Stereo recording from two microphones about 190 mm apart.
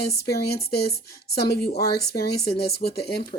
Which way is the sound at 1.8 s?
55° left (ahead or behind).